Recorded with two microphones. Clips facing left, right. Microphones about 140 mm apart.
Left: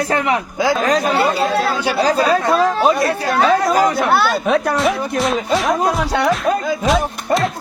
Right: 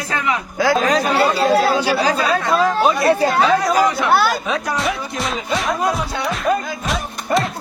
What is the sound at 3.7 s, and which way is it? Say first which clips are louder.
Speech: left 1 dB; 50° left (ahead or behind).